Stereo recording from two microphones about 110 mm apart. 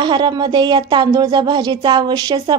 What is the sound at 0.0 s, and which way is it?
A woman's voice, 45° right (ahead or behind).